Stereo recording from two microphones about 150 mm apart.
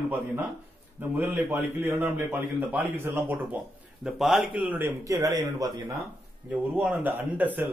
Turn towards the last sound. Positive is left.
turn(degrees=-10)  # may be behind; listen again after turning